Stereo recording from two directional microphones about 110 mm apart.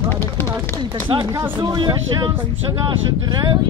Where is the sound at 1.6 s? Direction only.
40° right (ahead or behind).